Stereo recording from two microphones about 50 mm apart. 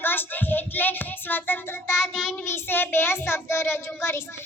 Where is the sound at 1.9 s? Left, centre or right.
Centre.